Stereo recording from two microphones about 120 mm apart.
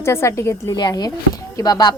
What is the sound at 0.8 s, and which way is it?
Speech, 35° left (ahead or behind).